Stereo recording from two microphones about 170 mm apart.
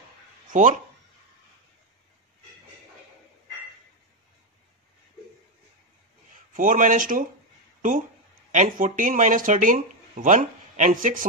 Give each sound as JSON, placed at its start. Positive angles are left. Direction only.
{"t": 0.5, "sound": "speech", "side_deg": -50}
{"t": 6.5, "sound": "speech", "side_deg": -50}
{"t": 8.5, "sound": "speech", "side_deg": -50}